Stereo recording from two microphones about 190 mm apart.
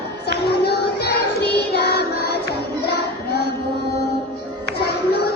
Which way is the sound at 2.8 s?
60° left (ahead or behind).